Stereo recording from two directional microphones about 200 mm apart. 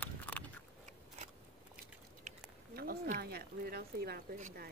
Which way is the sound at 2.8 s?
50° right (ahead or behind).